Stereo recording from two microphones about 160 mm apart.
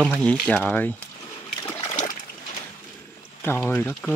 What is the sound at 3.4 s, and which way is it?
Speech, 15° left (ahead or behind).